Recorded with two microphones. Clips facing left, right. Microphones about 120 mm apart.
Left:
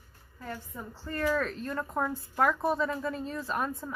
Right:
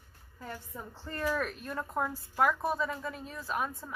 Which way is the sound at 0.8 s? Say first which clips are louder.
Left 4 dB; 20° right (ahead or behind).